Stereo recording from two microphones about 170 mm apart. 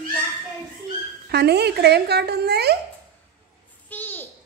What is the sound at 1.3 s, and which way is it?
Speech, 75° right (ahead or behind).